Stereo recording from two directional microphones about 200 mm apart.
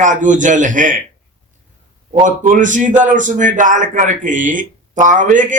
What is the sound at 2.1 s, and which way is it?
A man's voice, 40° right (ahead or behind).